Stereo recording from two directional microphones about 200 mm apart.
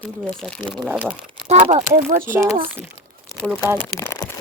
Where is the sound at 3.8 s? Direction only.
10° left (ahead or behind).